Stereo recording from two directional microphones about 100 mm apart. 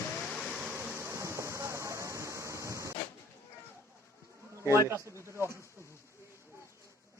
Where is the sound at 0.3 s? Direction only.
Centre (ahead or behind).